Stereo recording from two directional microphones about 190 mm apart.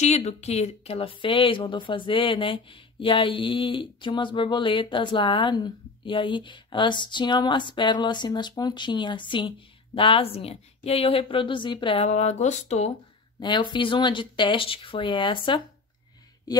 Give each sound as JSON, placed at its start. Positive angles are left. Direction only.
{"t": 0.0, "sound": "a woman's voice", "side_deg": 35}
{"t": 13.4, "sound": "speech", "side_deg": 25}